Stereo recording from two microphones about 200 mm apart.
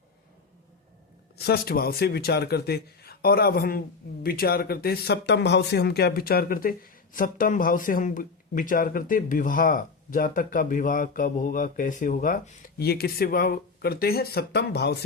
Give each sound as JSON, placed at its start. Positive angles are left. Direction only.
{"t": 1.5, "sound": "speech", "side_deg": 50}